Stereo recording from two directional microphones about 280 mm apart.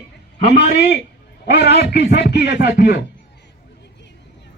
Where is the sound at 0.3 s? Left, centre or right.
Left.